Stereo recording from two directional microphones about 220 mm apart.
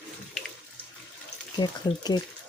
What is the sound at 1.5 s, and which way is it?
Speech, 20° left (ahead or behind).